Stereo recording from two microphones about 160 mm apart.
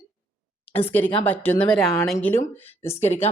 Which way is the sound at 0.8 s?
10° left (ahead or behind).